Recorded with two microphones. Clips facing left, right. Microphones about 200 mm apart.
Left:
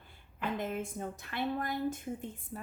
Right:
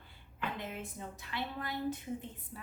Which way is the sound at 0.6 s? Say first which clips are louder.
Left 6 dB; 45° left (ahead or behind).